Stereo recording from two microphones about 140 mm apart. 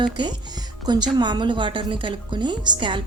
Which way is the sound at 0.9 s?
30° right (ahead or behind).